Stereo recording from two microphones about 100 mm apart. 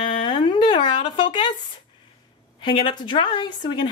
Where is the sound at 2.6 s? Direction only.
50° left (ahead or behind).